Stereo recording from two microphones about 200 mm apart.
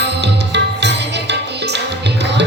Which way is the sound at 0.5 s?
60° right (ahead or behind).